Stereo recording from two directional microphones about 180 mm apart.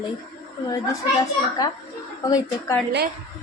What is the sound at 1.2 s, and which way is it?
A child's voice, 20° left (ahead or behind).